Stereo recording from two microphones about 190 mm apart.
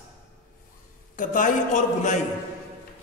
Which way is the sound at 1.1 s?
45° left (ahead or behind).